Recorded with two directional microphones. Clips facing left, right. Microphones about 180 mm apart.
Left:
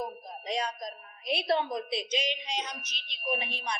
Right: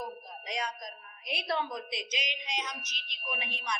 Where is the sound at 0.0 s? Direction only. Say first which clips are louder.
Left 3 dB; 25° left (ahead or behind).